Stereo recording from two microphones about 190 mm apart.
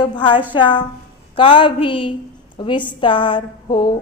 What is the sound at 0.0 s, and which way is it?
A woman's voice, 25° left (ahead or behind).